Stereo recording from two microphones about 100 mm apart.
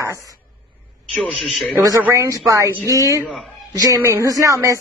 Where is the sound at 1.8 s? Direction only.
30° right (ahead or behind).